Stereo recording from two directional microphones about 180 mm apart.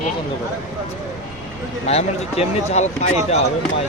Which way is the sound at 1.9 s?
35° left (ahead or behind).